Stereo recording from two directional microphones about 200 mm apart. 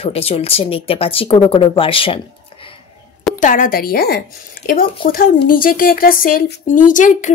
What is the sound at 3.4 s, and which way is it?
A woman's voice, 40° left (ahead or behind).